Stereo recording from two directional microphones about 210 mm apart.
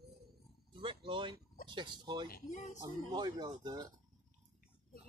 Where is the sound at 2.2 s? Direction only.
40° left (ahead or behind).